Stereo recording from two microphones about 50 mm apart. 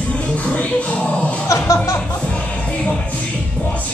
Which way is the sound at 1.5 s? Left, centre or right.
Left.